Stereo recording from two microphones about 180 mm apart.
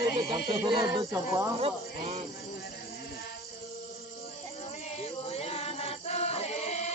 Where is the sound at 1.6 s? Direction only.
35° right (ahead or behind).